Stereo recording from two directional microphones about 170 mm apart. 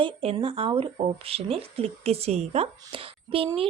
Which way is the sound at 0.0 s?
30° right (ahead or behind).